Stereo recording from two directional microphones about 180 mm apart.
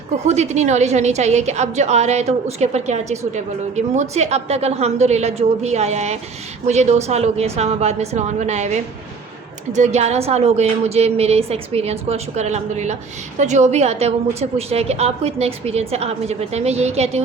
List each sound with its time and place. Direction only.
0.3 s a woman's voice: 40° right (ahead or behind)